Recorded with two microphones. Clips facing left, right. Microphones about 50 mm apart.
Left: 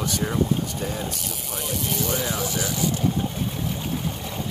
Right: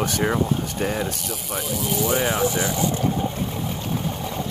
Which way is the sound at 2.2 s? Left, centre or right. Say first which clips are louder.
Right 5 dB; right.